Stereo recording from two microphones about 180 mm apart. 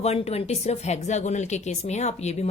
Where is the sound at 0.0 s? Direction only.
35° left (ahead or behind).